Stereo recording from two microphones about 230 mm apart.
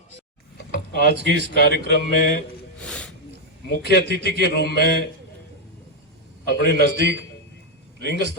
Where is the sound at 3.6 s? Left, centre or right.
Left.